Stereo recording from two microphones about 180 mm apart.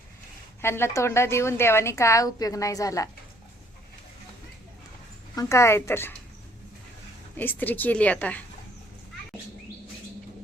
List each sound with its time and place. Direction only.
0.6 s a woman's voice: 15° left (ahead or behind)
5.3 s a woman's voice: 15° left (ahead or behind)
7.3 s a woman's voice: 10° left (ahead or behind)